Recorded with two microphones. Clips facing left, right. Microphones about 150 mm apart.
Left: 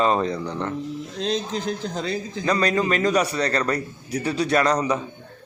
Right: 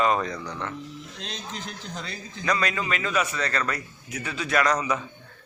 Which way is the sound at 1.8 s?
40° left (ahead or behind).